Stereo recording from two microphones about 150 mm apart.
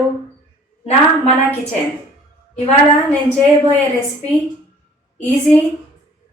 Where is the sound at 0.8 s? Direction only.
45° left (ahead or behind).